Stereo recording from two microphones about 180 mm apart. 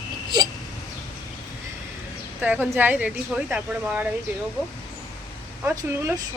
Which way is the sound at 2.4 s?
10° right (ahead or behind).